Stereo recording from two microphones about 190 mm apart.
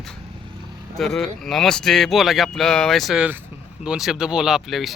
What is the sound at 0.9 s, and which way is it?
Speech, 5° left (ahead or behind).